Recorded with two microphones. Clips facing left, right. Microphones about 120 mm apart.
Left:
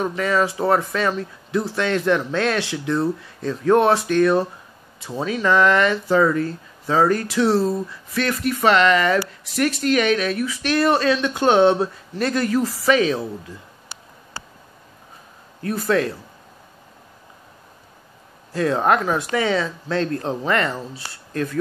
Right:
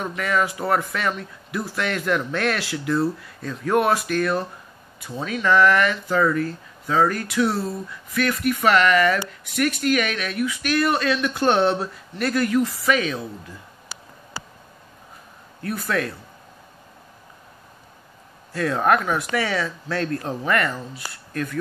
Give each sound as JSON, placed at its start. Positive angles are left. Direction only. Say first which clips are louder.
{"t": 0.0, "sound": "a man's voice", "louder": "left 3 dB", "side_deg": 25}
{"t": 5.4, "sound": "speech", "louder": "left 1 dB", "side_deg": 20}
{"t": 15.6, "sound": "a man's voice", "louder": "left 5 dB", "side_deg": 30}
{"t": 18.5, "sound": "speech", "louder": "left 1 dB", "side_deg": 25}